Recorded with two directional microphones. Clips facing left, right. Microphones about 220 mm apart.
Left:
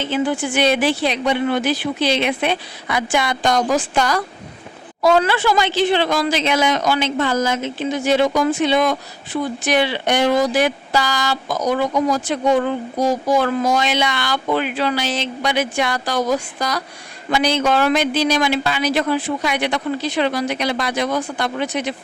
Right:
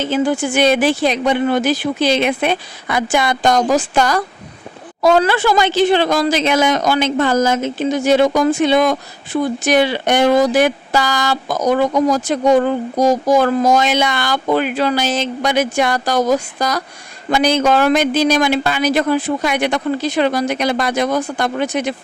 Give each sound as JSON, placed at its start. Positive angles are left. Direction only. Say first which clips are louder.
{"t": 0.0, "sound": "speech", "louder": "right 3 dB", "side_deg": -45}